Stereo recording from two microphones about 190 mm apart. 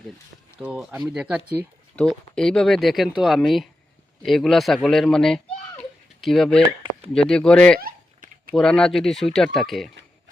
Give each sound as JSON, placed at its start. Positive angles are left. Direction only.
{"t": 0.6, "sound": "a child's voice", "side_deg": -5}
{"t": 7.8, "sound": "a sound", "side_deg": -50}
{"t": 8.5, "sound": "speech", "side_deg": 5}